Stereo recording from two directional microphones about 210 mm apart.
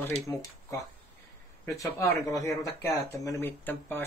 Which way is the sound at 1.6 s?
15° left (ahead or behind).